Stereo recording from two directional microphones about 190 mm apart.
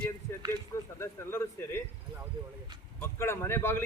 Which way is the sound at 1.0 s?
10° left (ahead or behind).